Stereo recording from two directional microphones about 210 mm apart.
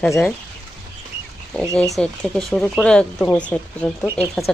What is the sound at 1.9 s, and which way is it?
Speech, centre (ahead or behind).